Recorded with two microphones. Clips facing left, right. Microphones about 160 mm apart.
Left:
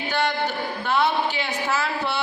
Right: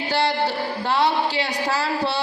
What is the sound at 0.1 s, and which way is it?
A woman's voice, 35° right (ahead or behind).